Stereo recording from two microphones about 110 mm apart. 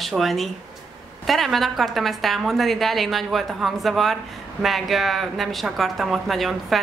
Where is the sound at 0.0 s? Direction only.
Centre (ahead or behind).